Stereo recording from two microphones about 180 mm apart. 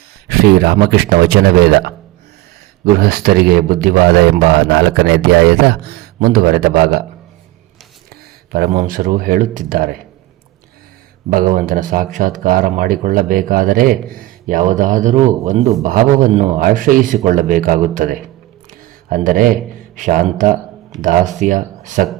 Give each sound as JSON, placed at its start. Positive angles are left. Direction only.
{"t": 0.3, "sound": "a man's voice", "side_deg": -60}
{"t": 3.0, "sound": "a man's voice", "side_deg": -55}
{"t": 8.1, "sound": "a sound", "side_deg": -60}
{"t": 8.7, "sound": "speech", "side_deg": -45}
{"t": 11.3, "sound": "a man's voice", "side_deg": -50}
{"t": 16.6, "sound": "speech", "side_deg": -50}
{"t": 18.7, "sound": "a sound", "side_deg": -50}
{"t": 20.0, "sound": "speech", "side_deg": -45}